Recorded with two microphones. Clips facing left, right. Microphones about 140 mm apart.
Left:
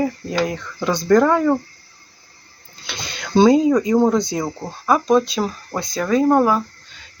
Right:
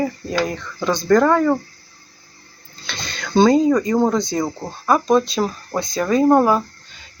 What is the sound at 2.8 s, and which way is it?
Speech, 10° left (ahead or behind).